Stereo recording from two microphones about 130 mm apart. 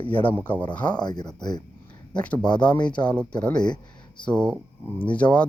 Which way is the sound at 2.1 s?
10° left (ahead or behind).